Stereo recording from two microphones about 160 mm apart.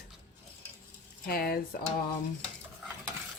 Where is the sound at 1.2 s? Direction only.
70° left (ahead or behind).